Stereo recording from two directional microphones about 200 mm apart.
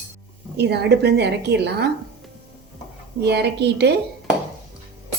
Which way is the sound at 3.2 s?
55° right (ahead or behind).